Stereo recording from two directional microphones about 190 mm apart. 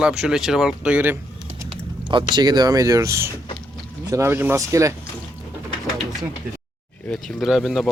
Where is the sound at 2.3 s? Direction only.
20° right (ahead or behind).